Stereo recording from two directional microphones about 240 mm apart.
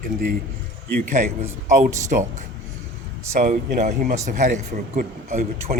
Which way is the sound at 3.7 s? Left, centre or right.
Right.